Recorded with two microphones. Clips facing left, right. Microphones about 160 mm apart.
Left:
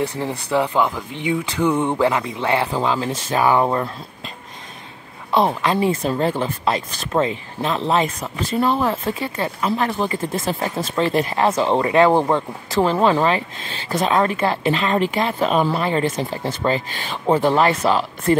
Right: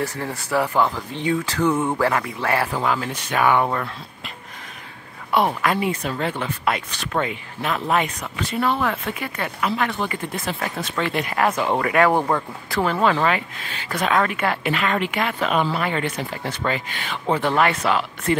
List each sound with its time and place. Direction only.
0.2 s speech: 20° left (ahead or behind)
5.3 s speech: 25° left (ahead or behind)